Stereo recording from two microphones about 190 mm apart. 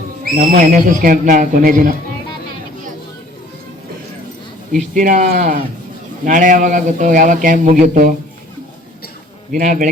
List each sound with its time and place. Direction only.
0.3 s speech: 45° right (ahead or behind)
4.9 s speech: 45° right (ahead or behind)
9.5 s speech: 45° right (ahead or behind)